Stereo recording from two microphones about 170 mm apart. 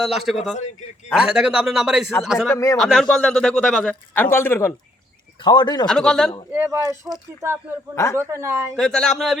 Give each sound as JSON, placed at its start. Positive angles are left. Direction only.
{"t": 0.0, "sound": "a man's voice", "side_deg": 0}
{"t": 5.4, "sound": "speech", "side_deg": 25}
{"t": 5.8, "sound": "a man's voice", "side_deg": 5}
{"t": 6.5, "sound": "speech", "side_deg": -15}
{"t": 8.1, "sound": "speech", "side_deg": -15}
{"t": 8.7, "sound": "a man's voice", "side_deg": 5}